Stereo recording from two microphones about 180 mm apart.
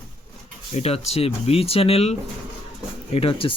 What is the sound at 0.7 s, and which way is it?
Speech, 35° left (ahead or behind).